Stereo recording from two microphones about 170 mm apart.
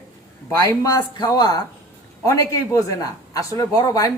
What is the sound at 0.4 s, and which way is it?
Speech, 20° left (ahead or behind).